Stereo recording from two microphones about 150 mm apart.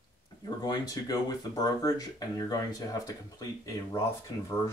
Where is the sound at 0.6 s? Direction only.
25° left (ahead or behind).